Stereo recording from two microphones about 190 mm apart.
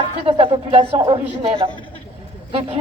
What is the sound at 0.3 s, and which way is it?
A woman's voice, 30° right (ahead or behind).